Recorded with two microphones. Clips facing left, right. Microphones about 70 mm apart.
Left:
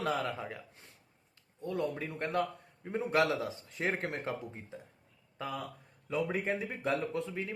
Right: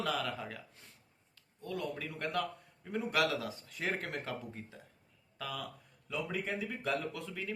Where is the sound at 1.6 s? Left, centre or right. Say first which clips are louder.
Left 4 dB; left.